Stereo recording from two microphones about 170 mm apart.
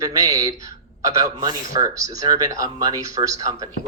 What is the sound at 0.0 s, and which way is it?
Speech, 20° right (ahead or behind).